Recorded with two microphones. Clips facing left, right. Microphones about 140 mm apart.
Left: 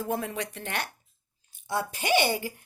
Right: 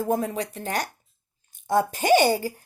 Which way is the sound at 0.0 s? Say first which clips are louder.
Right 6 dB; 40° right (ahead or behind).